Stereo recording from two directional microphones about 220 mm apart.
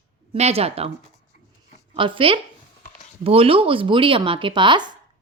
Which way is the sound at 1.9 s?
25° right (ahead or behind).